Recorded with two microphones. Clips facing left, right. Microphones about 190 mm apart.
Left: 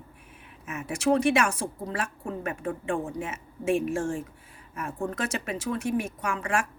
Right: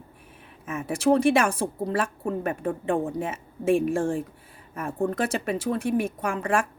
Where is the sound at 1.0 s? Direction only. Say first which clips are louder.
Right 3 dB; 30° right (ahead or behind).